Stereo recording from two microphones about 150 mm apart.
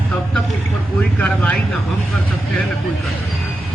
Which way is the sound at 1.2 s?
10° left (ahead or behind).